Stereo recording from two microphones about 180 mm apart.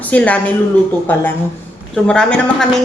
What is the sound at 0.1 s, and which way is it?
Speech, 10° left (ahead or behind).